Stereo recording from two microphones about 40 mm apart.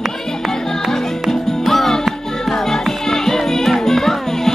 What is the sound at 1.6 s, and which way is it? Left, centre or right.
Music, centre.